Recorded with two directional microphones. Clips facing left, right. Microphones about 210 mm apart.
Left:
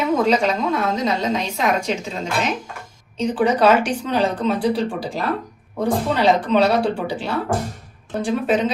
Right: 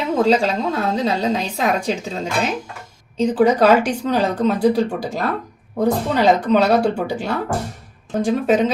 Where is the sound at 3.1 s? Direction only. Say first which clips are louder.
Right 3 dB; 40° right (ahead or behind).